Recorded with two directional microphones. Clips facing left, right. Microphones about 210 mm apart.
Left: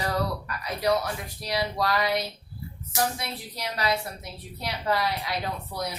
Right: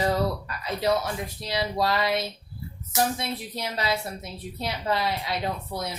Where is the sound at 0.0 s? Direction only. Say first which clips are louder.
Right 4 dB; 25° right (ahead or behind).